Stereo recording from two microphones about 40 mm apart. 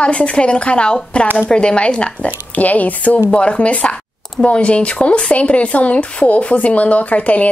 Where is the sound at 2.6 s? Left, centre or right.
Left.